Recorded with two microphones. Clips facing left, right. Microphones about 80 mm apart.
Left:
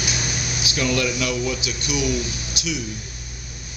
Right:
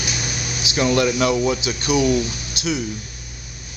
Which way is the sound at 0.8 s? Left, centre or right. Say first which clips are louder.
Right 5 dB; right.